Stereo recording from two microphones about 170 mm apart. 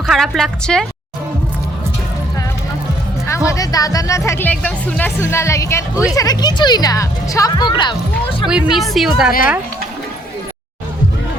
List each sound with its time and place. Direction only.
0.1 s speech: centre (ahead or behind)
3.2 s speech: 15° left (ahead or behind)
8.4 s speech: 5° right (ahead or behind)